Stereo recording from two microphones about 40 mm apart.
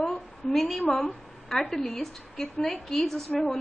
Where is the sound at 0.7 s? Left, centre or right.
Centre.